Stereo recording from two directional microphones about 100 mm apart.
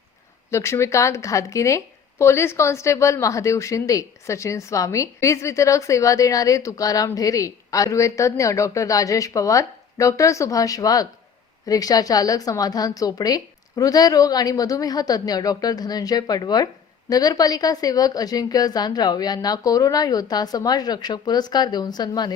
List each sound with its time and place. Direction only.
0.5 s speech: 30° left (ahead or behind); by 22.3 s 45° left (ahead or behind)